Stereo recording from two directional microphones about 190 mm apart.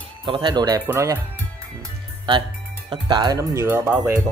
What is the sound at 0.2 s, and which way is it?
Speech, 25° right (ahead or behind).